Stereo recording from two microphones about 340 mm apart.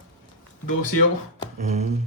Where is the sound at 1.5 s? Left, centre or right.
Centre.